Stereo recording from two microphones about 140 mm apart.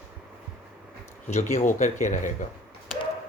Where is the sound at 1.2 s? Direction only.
55° left (ahead or behind).